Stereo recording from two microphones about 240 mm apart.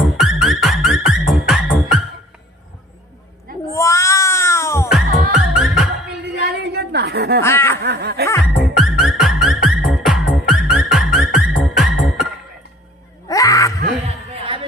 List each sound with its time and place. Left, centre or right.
0.0 s music: centre
3.7 s cat: centre
4.8 s music: centre
6.4 s a sound: right
7.4 s snicker: centre
7.8 s snicker: right
8.8 s music: centre
13.3 s a sound: centre
14.0 s a sound: right